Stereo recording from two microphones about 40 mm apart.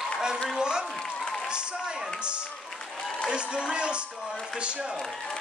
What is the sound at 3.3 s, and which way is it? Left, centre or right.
A man's voice, right.